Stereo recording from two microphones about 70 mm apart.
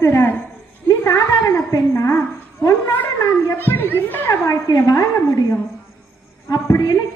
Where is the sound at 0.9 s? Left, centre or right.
Left.